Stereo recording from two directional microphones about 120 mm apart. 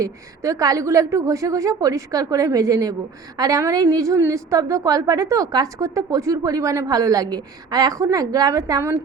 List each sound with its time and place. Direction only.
0.0 s a woman's voice: 30° right (ahead or behind)